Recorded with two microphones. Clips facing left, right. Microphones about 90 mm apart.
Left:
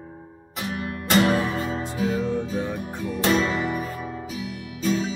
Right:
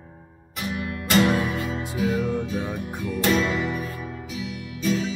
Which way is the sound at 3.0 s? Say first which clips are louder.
Even; 25° left (ahead or behind).